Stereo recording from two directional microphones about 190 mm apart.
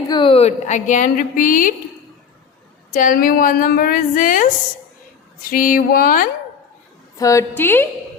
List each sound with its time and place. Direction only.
0.1 s a woman's voice: 25° left (ahead or behind); by 1.7 s 45° left (ahead or behind)
2.9 s a woman's voice: 45° left (ahead or behind)
7.2 s a woman's voice: 15° left (ahead or behind)